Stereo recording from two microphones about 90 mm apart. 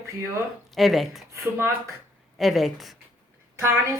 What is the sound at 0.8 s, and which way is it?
Speech, centre (ahead or behind).